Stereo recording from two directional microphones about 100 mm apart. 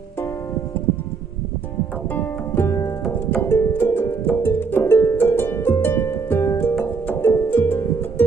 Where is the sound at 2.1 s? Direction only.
20° left (ahead or behind).